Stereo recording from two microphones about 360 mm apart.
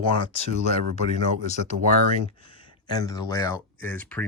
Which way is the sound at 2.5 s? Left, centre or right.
Centre.